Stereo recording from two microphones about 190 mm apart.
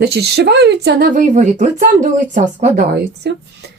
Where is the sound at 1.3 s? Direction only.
40° right (ahead or behind).